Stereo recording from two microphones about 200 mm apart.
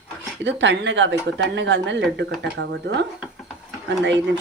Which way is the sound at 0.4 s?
65° right (ahead or behind).